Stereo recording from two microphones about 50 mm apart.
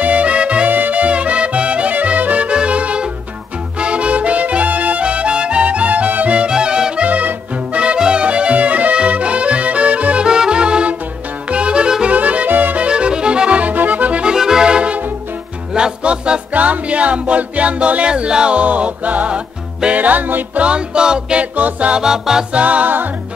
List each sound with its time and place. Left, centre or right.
0.0 s music: right
0.7 s music: right; by 7.1 s centre
7.1 s music: right
10.2 s music: centre
12.2 s music: right
12.8 s music: right
14.2 s accordion: centre
15.7 s music: right
20.6 s music: centre
22.0 s music: centre
22.5 s music: right